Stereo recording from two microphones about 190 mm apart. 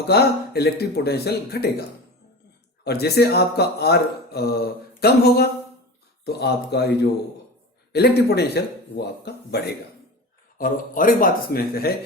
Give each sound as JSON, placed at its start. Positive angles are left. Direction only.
{"t": 0.0, "sound": "speech", "side_deg": 60}
{"t": 2.8, "sound": "speech", "side_deg": 55}
{"t": 10.6, "sound": "speech", "side_deg": 45}